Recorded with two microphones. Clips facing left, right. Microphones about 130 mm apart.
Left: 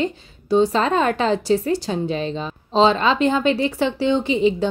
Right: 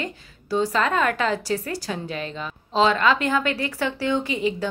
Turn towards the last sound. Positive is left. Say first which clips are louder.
# left 6 dB
turn(degrees=25)  # may be behind; listen again after turning